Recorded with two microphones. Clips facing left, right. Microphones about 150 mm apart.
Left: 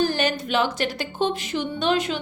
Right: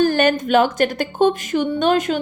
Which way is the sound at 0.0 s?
50° right (ahead or behind).